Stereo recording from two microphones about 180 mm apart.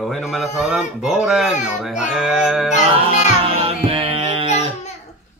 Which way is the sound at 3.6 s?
30° right (ahead or behind).